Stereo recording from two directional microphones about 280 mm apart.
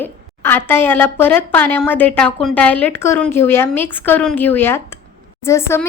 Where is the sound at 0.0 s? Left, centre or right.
Centre.